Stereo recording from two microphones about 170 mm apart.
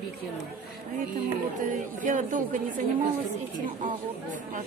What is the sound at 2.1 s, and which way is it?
Speech, 50° right (ahead or behind).